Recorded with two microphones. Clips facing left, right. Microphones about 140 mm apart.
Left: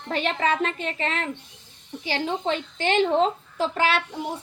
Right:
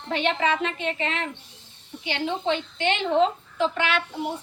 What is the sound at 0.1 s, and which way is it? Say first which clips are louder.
A woman's voice: even; 40° left (ahead or behind).